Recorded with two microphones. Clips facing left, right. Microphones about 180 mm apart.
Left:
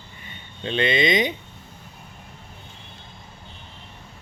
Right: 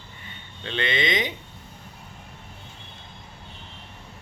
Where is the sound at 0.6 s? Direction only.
15° left (ahead or behind).